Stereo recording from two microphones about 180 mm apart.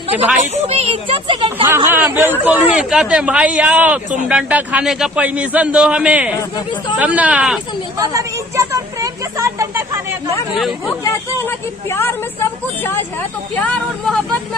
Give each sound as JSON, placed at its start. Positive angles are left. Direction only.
{"t": 0.5, "sound": "speech", "side_deg": -35}
{"t": 1.6, "sound": "a man's voice", "side_deg": -10}
{"t": 7.9, "sound": "speech", "side_deg": -15}
{"t": 10.8, "sound": "speech", "side_deg": 15}